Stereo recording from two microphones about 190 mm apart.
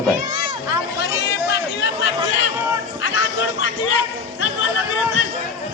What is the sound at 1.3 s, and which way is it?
Chatter, 65° left (ahead or behind).